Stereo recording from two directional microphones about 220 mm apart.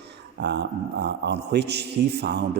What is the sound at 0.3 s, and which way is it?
A man's voice, 50° right (ahead or behind).